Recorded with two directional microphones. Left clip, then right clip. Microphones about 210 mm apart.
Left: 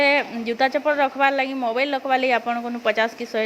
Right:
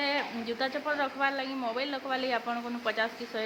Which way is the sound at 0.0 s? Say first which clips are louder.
Left 12 dB; 35° left (ahead or behind).